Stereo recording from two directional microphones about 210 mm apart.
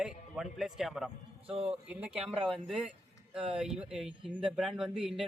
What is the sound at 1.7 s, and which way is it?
Speech, 5° right (ahead or behind).